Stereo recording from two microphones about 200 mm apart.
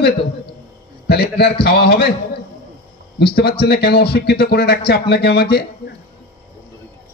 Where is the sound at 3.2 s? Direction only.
50° left (ahead or behind).